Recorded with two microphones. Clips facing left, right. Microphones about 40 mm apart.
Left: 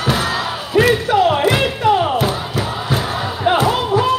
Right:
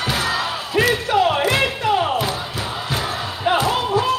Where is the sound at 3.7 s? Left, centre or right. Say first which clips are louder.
Left 3 dB; left.